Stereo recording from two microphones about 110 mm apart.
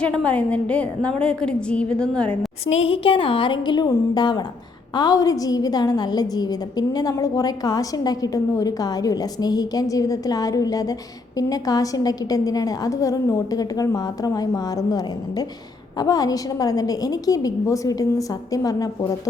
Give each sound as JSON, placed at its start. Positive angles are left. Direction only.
{"t": 0.0, "sound": "a woman's voice", "side_deg": 10}
{"t": 2.6, "sound": "a woman's voice", "side_deg": 60}